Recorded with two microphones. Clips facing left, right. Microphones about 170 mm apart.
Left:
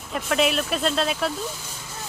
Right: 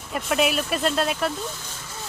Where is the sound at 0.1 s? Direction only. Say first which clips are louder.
Even; centre (ahead or behind).